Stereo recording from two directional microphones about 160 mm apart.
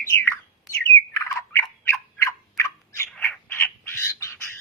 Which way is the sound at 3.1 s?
5° left (ahead or behind).